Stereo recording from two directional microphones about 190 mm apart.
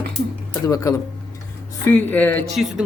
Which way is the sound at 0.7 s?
20° left (ahead or behind).